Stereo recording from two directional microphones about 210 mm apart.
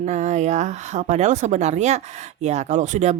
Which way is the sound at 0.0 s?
35° right (ahead or behind).